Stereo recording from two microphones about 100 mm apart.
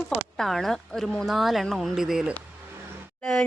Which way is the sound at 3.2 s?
5° left (ahead or behind).